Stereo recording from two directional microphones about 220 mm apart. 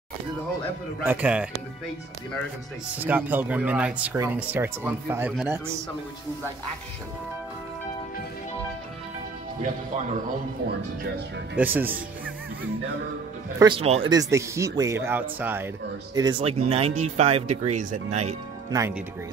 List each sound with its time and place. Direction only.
1.0 s speech: 5° right (ahead or behind)
3.0 s speech: 10° right (ahead or behind)
11.5 s speech: 10° right (ahead or behind)
13.6 s speech: 20° right (ahead or behind)
14.1 s speech: 15° right (ahead or behind)
16.2 s speech: 20° right (ahead or behind)
18.7 s speech: 10° right (ahead or behind)